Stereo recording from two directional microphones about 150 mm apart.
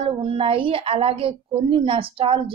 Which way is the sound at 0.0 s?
35° right (ahead or behind).